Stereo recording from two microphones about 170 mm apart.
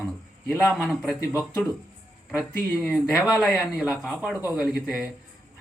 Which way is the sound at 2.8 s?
Centre (ahead or behind).